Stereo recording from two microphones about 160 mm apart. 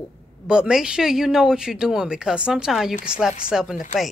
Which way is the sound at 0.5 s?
5° right (ahead or behind).